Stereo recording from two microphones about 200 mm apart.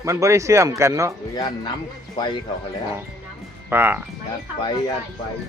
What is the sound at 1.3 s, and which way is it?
Speech, 20° left (ahead or behind).